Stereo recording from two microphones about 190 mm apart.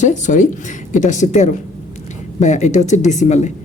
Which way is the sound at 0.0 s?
40° left (ahead or behind).